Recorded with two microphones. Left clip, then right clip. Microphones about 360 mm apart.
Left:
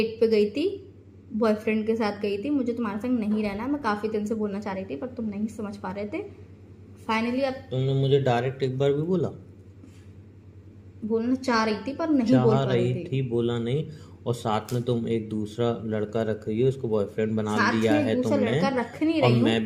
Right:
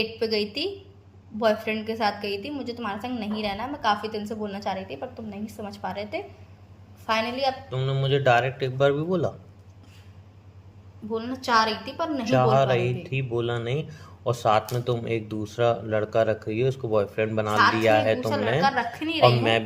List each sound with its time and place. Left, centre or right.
0.0 s speech: right
11.1 s speech: right